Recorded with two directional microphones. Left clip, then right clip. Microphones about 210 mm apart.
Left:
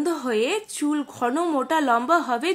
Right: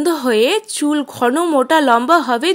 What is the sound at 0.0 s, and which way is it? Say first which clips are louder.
Speech: right 9 dB; 40° right (ahead or behind).